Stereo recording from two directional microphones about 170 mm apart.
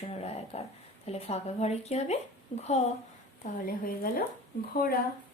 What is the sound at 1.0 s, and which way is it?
Speech, 35° left (ahead or behind).